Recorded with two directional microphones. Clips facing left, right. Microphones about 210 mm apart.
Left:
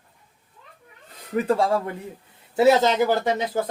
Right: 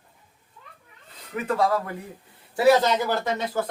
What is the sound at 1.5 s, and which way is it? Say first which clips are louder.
Speech: left 1 dB; 30° left (ahead or behind).